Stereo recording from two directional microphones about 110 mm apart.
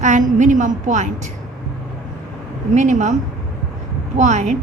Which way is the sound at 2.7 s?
90° right.